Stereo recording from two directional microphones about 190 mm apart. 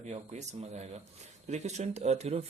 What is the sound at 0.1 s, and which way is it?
Speech, 35° right (ahead or behind).